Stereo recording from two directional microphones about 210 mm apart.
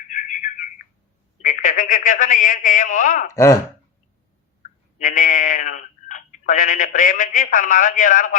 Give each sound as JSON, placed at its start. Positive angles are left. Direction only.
{"t": 0.1, "sound": "bird", "side_deg": 35}
{"t": 1.4, "sound": "a man's voice", "side_deg": 35}
{"t": 3.3, "sound": "speech", "side_deg": 15}
{"t": 4.9, "sound": "speech", "side_deg": 40}